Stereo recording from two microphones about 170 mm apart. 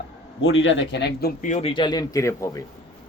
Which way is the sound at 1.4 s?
45° left (ahead or behind).